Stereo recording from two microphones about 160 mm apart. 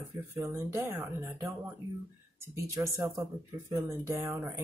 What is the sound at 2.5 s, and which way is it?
Speech, 20° right (ahead or behind).